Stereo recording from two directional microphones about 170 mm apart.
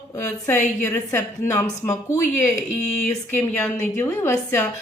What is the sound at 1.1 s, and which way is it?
A woman's voice, 20° left (ahead or behind).